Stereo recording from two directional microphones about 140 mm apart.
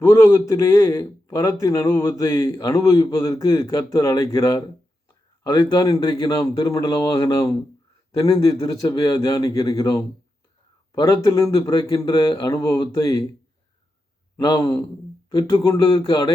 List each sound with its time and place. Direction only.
0.0 s a man's voice: 20° left (ahead or behind)
8.7 s a man's voice: 25° left (ahead or behind)
14.3 s a man's voice: 25° left (ahead or behind)